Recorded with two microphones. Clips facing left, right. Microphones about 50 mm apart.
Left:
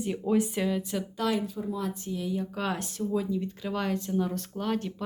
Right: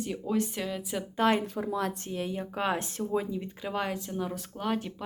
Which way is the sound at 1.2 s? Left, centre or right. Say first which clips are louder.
Right 4 dB; right.